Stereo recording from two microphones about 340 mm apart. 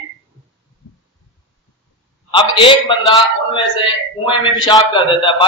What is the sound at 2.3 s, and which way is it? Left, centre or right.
A man's voice, centre.